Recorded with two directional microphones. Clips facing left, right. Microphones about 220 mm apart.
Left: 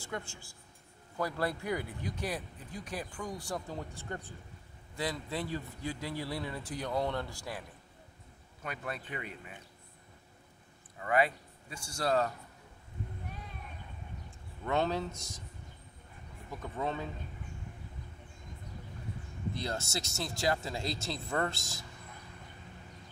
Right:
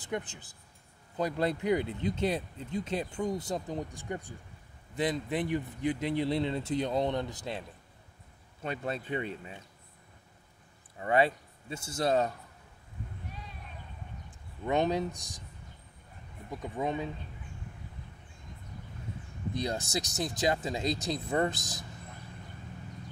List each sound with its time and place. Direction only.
0.0 s speech: 20° right (ahead or behind)
8.6 s speech: 25° right (ahead or behind)
11.0 s a man's voice: 25° right (ahead or behind)
14.6 s speech: 15° right (ahead or behind)
16.6 s speech: 15° right (ahead or behind)
19.5 s speech: 15° right (ahead or behind)